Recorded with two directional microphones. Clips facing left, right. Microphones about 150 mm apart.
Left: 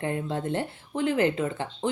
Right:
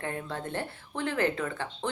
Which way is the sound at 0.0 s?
20° left (ahead or behind).